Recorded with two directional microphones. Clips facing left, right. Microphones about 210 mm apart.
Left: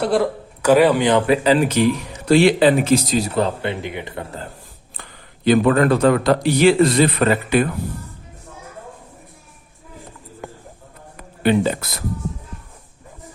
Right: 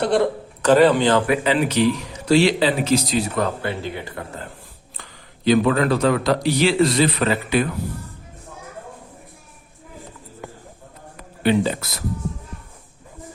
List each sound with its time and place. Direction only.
0.0 s a man's voice: centre (ahead or behind); by 1.4 s 20° left (ahead or behind)
1.5 s a man's voice: 45° left (ahead or behind)
3.3 s speech: 25° left (ahead or behind)
5.5 s a man's voice: 50° left (ahead or behind)
11.4 s a man's voice: 50° left (ahead or behind)